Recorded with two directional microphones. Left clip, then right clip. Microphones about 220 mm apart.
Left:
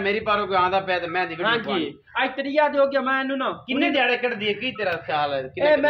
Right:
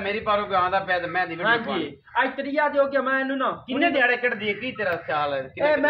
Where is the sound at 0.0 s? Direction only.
50° left (ahead or behind).